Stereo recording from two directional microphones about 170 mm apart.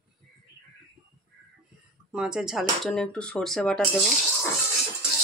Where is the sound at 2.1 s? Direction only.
5° right (ahead or behind).